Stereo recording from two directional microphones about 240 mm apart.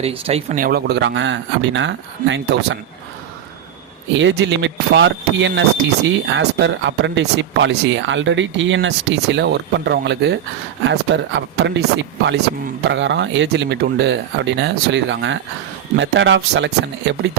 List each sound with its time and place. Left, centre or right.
0.0 s speech: right
4.2 s speech: right